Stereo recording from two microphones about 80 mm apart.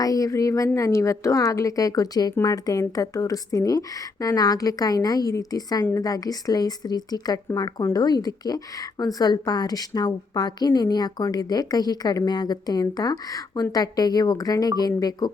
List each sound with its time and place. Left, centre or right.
0.0 s a woman's voice: left